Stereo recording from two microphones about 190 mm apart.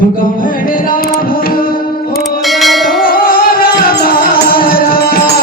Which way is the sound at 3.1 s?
50° left (ahead or behind).